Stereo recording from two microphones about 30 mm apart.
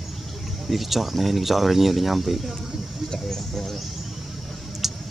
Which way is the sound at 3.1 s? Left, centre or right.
Centre.